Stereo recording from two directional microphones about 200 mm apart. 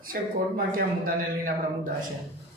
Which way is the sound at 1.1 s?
45° right (ahead or behind).